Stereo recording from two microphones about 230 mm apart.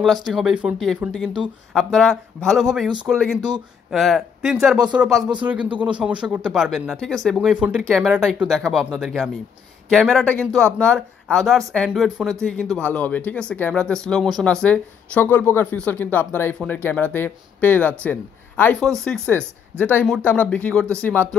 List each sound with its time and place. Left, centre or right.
0.0 s speech: centre
3.3 s speech: centre
3.9 s speech: centre